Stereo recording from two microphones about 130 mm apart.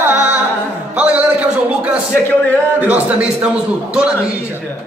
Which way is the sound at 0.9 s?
10° right (ahead or behind).